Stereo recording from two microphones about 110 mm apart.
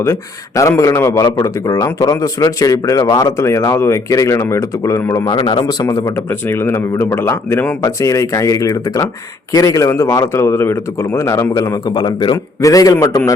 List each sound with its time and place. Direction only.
0.0 s a man's voice: 30° left (ahead or behind)
5.2 s a man's voice: 40° left (ahead or behind)
6.5 s a man's voice: 20° left (ahead or behind)